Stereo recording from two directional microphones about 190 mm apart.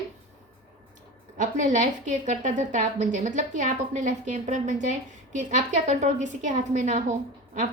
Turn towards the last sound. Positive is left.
turn(degrees=-40)  # may be behind; listen again after turning